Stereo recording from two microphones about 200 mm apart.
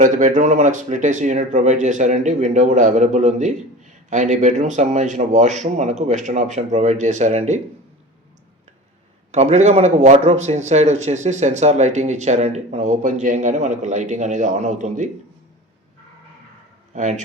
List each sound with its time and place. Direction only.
0.0 s speech: 40° right (ahead or behind)
9.3 s speech: 35° right (ahead or behind)
16.9 s speech: 35° right (ahead or behind)